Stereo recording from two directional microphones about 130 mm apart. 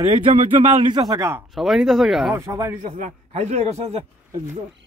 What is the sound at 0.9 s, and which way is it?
Speech, 30° right (ahead or behind).